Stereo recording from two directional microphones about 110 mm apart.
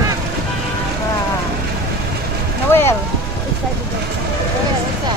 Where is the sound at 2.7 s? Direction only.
25° left (ahead or behind).